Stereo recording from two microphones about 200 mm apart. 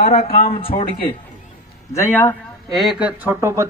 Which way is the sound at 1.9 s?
10° left (ahead or behind).